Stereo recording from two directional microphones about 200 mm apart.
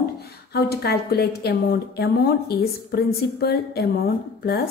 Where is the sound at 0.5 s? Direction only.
50° left (ahead or behind).